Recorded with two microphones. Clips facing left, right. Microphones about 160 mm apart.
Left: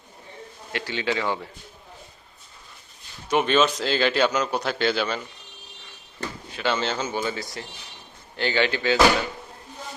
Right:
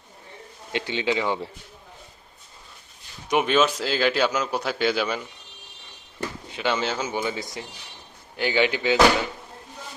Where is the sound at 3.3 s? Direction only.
10° right (ahead or behind).